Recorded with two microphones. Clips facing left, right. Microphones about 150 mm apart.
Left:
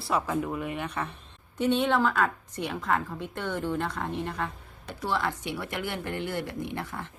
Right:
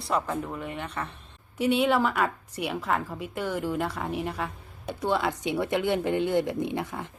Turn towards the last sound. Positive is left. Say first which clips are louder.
# right 4 dB
turn(degrees=-15)  # may be behind; listen again after turning